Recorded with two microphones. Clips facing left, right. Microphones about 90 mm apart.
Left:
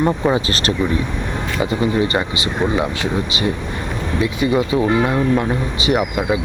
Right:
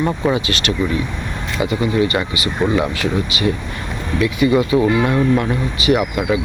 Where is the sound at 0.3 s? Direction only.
35° left (ahead or behind).